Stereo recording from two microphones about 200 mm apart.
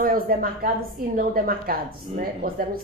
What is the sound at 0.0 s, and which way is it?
Speech, 45° right (ahead or behind).